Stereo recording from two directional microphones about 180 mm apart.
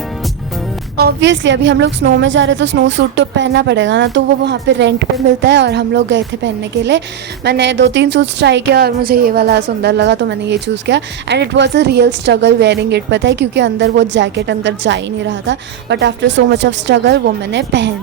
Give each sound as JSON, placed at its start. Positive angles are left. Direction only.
{"t": 0.9, "sound": "a woman's voice", "side_deg": -70}
{"t": 7.4, "sound": "a woman's voice", "side_deg": -70}